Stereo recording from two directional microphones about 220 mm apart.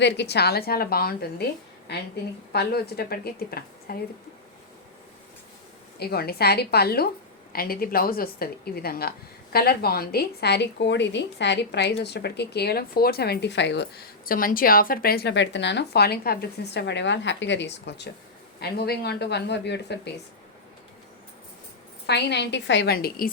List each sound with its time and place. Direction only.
0.0 s a woman's voice: 50° left (ahead or behind)
2.5 s a woman's voice: 45° left (ahead or behind)
6.0 s a woman's voice: 45° left (ahead or behind)
14.3 s a woman's voice: 40° left (ahead or behind)
22.0 s a woman's voice: 50° left (ahead or behind)